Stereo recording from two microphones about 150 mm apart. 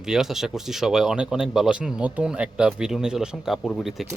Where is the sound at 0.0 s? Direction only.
5° right (ahead or behind).